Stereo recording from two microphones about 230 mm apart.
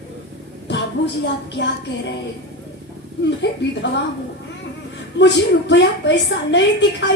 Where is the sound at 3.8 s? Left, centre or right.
Left.